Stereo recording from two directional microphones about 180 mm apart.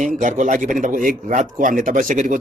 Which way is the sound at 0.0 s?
45° right (ahead or behind).